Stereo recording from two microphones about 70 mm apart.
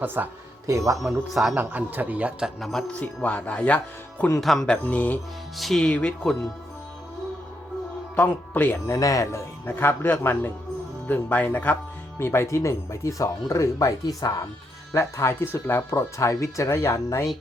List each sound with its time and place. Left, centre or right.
0.0 s speech: right
1.3 s a man's voice: centre
1.5 s speech: right
2.6 s a man's voice: centre
3.0 s speech: left
4.4 s a man's voice: centre
4.6 s speech: centre
5.5 s a man's voice: centre
8.1 s speech: left
8.9 s speech: left
12.2 s speech: left
14.9 s speech: left
15.9 s speech: left